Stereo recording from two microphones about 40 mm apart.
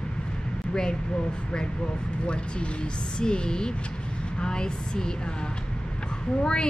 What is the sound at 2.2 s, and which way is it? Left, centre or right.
A woman's voice, left.